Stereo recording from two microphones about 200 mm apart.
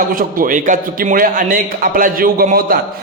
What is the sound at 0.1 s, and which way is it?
A man's voice, 45° right (ahead or behind).